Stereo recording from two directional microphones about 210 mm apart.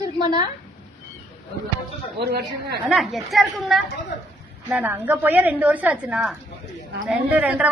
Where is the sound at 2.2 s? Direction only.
50° right (ahead or behind).